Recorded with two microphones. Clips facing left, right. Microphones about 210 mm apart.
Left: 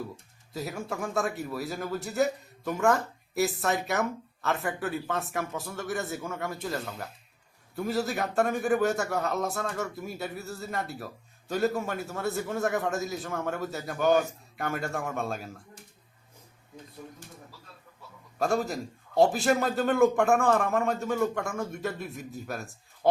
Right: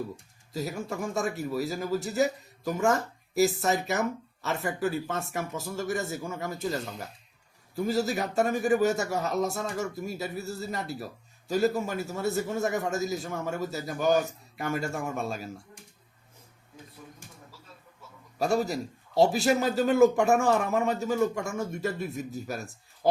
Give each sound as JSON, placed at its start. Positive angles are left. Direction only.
{"t": 0.5, "sound": "a man's voice", "side_deg": 0}
{"t": 18.3, "sound": "a man's voice", "side_deg": 0}